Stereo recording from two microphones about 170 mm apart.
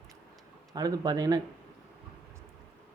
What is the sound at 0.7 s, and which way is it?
Speech, 20° right (ahead or behind).